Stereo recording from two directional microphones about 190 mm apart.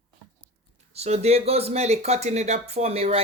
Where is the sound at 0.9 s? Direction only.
35° right (ahead or behind).